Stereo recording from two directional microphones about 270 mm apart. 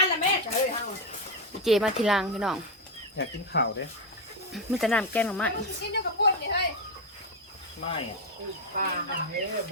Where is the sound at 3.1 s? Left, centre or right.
Left.